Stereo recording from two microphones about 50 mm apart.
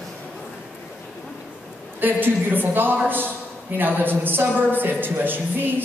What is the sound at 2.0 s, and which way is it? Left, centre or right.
A woman's voice, right.